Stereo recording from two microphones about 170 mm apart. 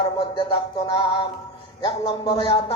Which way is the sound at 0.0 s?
30° left (ahead or behind).